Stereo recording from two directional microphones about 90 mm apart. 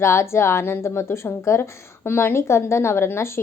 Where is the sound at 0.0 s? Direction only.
30° left (ahead or behind).